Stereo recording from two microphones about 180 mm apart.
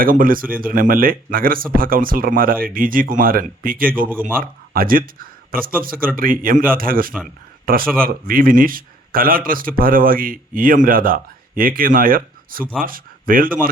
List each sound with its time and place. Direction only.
0.0 s speech: 50° right (ahead or behind)